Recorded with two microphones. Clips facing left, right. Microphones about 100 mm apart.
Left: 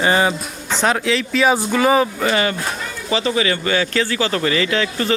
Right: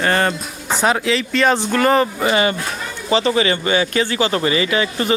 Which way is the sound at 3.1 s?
35° right (ahead or behind).